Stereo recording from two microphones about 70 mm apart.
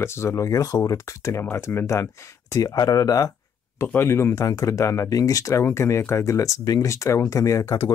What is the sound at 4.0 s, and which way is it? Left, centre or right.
Speech, left.